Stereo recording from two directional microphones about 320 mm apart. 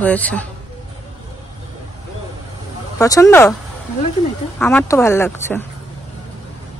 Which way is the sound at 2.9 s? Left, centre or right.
Centre.